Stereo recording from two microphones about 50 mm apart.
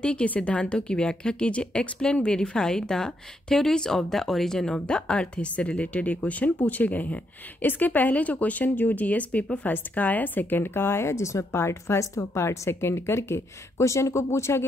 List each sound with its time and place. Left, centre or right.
0.0 s a woman's voice: left